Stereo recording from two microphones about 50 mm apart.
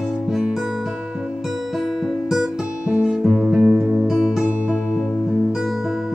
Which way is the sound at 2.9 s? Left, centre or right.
Centre.